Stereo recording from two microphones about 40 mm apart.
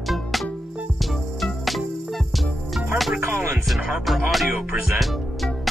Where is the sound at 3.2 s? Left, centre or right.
Right.